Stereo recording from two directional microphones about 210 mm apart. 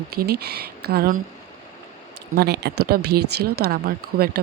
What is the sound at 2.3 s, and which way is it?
Speech, 50° right (ahead or behind).